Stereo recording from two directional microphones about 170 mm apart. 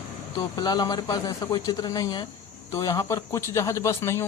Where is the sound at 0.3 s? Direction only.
25° left (ahead or behind).